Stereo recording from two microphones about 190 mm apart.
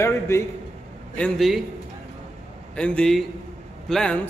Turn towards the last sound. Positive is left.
turn(degrees=5)  # may be behind; listen again after turning